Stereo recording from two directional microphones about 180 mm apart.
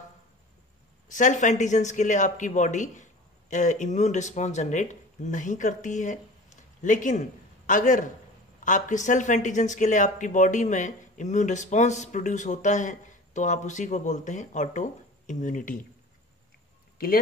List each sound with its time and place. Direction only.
1.0 s speech: 45° left (ahead or behind)